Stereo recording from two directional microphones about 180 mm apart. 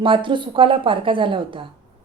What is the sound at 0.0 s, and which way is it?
A woman's voice, 30° right (ahead or behind).